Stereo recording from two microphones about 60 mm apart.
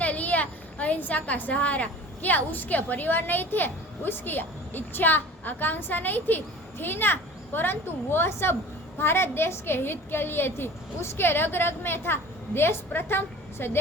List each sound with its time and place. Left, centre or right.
0.0 s a woman's voice: left